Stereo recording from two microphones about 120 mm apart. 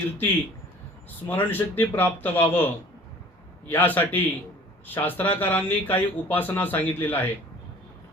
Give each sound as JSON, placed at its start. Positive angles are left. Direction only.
{"t": 1.3, "sound": "speech", "side_deg": 15}
{"t": 3.7, "sound": "speech", "side_deg": 15}